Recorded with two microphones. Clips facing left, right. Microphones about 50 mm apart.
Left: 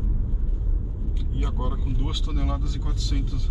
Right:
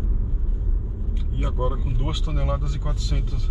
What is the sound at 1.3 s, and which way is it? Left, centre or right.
Speech, centre.